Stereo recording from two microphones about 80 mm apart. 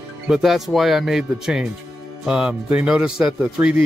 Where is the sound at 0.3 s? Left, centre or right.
Centre.